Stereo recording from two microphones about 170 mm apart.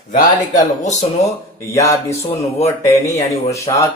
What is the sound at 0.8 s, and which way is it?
Speech, 45° left (ahead or behind).